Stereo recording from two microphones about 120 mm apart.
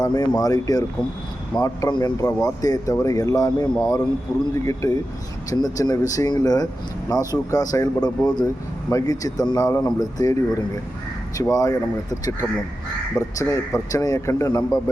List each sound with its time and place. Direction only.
0.0 s speech: 35° left (ahead or behind)
13.1 s speech: 25° left (ahead or behind)